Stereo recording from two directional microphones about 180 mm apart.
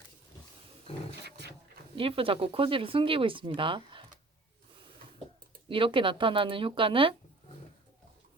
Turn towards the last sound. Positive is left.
turn(degrees=-30)  # may be behind; listen again after turning